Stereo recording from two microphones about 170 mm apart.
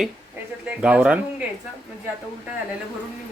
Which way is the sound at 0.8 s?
5° right (ahead or behind).